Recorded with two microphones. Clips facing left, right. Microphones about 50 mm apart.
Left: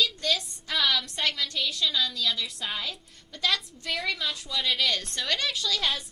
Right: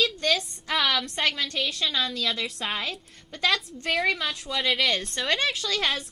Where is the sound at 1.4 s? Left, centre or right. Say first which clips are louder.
Right 1 dB; right.